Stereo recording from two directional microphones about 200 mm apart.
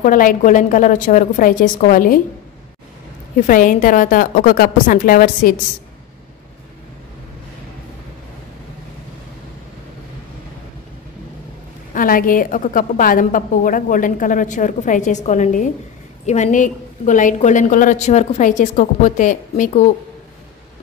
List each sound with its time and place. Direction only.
0.0 s a woman's voice: 45° left (ahead or behind)
3.3 s a woman's voice: 40° left (ahead or behind)
11.9 s a woman's voice: 45° left (ahead or behind)